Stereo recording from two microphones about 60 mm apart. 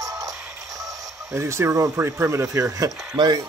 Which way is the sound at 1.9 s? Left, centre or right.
Right.